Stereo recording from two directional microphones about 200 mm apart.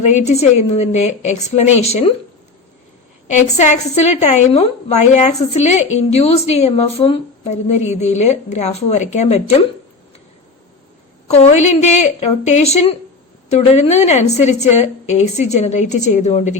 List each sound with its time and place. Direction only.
0.0 s speech: 35° left (ahead or behind)
3.2 s speech: 35° left (ahead or behind)
11.3 s speech: 35° left (ahead or behind)